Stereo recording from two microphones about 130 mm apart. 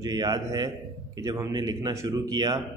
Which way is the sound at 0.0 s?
30° right (ahead or behind).